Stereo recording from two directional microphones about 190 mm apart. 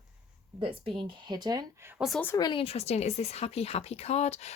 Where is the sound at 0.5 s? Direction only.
30° right (ahead or behind).